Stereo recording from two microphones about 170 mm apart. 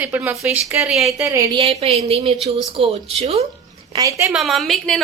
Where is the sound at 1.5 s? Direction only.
35° right (ahead or behind).